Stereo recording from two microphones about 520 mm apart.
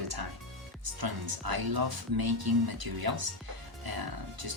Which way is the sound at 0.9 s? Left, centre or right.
Right.